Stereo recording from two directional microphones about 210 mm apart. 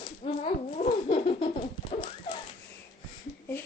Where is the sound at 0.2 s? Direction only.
25° left (ahead or behind).